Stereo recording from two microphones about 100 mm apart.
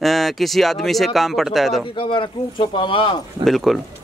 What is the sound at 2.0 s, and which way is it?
Speech, 55° left (ahead or behind).